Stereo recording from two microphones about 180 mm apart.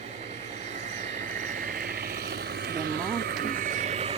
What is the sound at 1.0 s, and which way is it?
Vehicle, 45° right (ahead or behind).